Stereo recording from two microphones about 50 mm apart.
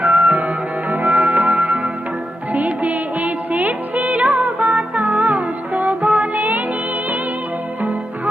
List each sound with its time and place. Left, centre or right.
0.0 s music: right
7.8 s music: right